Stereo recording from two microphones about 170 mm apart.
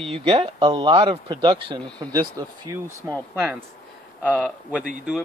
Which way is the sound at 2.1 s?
20° right (ahead or behind).